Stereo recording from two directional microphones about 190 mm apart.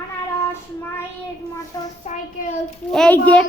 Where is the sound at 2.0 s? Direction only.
40° left (ahead or behind).